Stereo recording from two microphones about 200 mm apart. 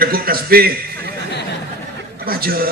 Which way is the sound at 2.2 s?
50° right (ahead or behind).